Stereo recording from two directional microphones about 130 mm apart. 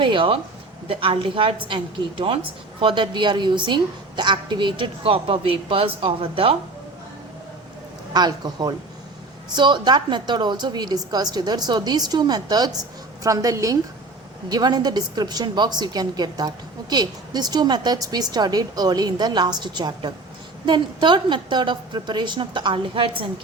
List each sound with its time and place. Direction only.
0.0 s a woman's voice: 40° right (ahead or behind)
8.1 s a woman's voice: 35° right (ahead or behind)